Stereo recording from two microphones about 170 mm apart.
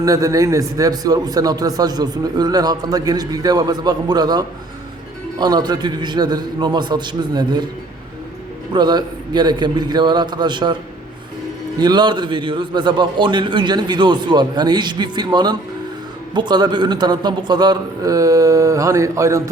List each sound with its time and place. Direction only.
0.0 s a man's voice: 20° right (ahead or behind)
8.7 s a man's voice: 25° right (ahead or behind)
11.8 s a man's voice: 25° right (ahead or behind)